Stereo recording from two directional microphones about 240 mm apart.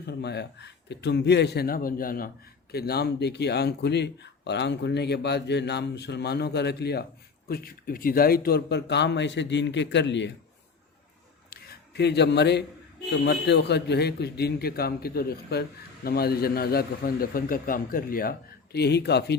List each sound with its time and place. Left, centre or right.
0.1 s speech: left
11.5 s a sound: left
13.1 s a man's voice: left